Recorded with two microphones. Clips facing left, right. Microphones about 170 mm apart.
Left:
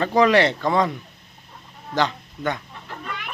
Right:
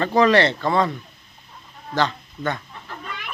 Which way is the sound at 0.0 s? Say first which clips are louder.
Even; 10° left (ahead or behind).